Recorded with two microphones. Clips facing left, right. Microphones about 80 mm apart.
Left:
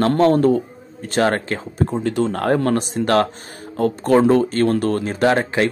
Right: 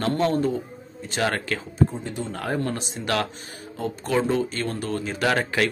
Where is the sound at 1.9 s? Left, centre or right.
Left.